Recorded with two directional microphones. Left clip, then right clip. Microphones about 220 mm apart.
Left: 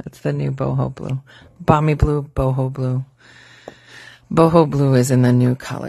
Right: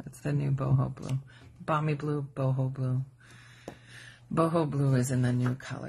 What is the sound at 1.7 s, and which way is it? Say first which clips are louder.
Speech: left 13 dB; 55° left (ahead or behind).